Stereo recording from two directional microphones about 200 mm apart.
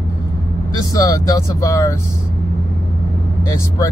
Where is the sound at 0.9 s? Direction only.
20° left (ahead or behind).